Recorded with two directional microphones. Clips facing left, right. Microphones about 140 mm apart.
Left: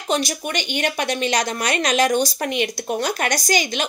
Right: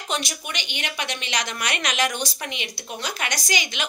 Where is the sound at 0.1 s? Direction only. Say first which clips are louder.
Left 7 dB; 40° left (ahead or behind).